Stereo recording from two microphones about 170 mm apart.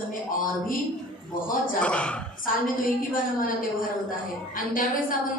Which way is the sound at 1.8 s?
5° left (ahead or behind).